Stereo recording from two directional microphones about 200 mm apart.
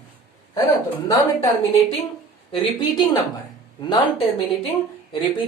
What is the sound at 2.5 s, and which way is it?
Speech, 25° left (ahead or behind).